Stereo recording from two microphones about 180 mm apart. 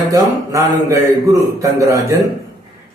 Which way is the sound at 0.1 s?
20° right (ahead or behind).